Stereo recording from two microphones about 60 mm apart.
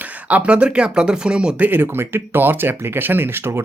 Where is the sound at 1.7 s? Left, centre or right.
Right.